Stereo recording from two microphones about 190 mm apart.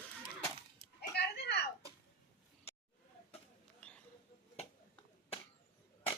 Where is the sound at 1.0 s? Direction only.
60° left (ahead or behind).